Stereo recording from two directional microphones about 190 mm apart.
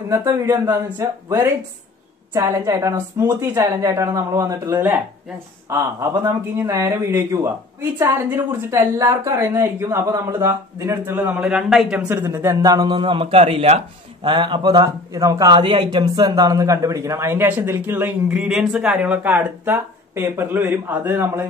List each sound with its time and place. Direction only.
0.1 s a man's voice: 15° right (ahead or behind)
12.2 s a man's voice: 15° right (ahead or behind)